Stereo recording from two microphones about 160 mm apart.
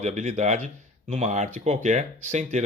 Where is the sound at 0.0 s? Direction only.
45° right (ahead or behind).